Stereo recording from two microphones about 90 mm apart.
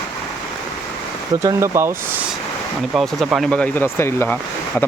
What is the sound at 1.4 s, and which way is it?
Speech, 30° right (ahead or behind).